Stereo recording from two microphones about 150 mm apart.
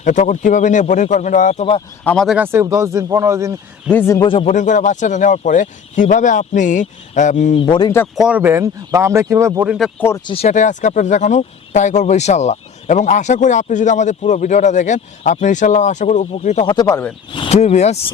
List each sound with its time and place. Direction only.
0.0 s speech: 55° left (ahead or behind)
2.0 s speech: centre (ahead or behind)
2.4 s speech: 15° right (ahead or behind)
3.9 s a man's voice: 15° left (ahead or behind)
4.2 s speech: 35° left (ahead or behind)
4.4 s speech: 55° left (ahead or behind)
7.6 s speech: 30° left (ahead or behind)
8.1 s speech: 5° right (ahead or behind)
9.6 s speech: centre (ahead or behind)
10.2 s speech: 40° left (ahead or behind)
10.5 s speech: 55° left (ahead or behind)
16.6 s speech: 25° left (ahead or behind)
17.3 s speech: 40° left (ahead or behind)